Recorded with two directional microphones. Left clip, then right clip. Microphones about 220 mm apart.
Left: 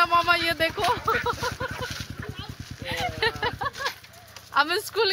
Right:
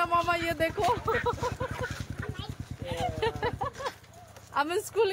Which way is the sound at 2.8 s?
5° left (ahead or behind).